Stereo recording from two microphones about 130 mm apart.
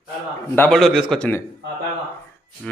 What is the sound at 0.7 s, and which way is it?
Speech, centre (ahead or behind).